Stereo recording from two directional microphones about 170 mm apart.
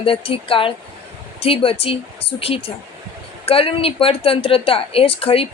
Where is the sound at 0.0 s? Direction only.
30° left (ahead or behind).